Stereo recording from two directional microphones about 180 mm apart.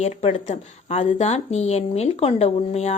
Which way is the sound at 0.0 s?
35° left (ahead or behind).